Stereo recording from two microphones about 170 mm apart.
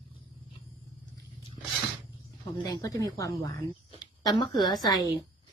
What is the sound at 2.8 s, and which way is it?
Speech, 20° left (ahead or behind).